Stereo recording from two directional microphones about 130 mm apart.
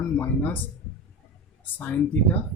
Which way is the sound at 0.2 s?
15° left (ahead or behind).